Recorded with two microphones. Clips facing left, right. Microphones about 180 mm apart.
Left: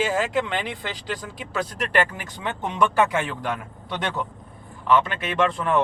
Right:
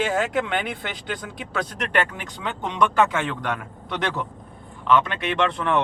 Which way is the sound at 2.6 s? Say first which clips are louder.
Right 1 dB; 10° left (ahead or behind).